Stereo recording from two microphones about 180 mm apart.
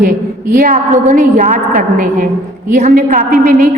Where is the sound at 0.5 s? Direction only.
50° right (ahead or behind).